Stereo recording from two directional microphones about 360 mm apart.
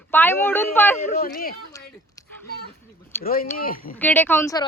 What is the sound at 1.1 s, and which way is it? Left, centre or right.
Speech, left.